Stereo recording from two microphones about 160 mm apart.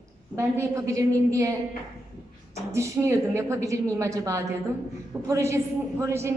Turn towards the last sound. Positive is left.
turn(degrees=-15)  # may be behind; listen again after turning